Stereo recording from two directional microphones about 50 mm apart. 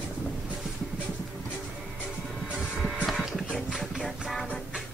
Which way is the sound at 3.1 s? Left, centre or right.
Centre.